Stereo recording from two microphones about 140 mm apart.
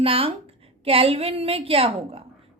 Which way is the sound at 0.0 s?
40° right (ahead or behind).